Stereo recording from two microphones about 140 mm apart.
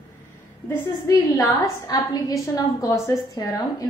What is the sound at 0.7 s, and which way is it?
A woman's voice, 25° left (ahead or behind).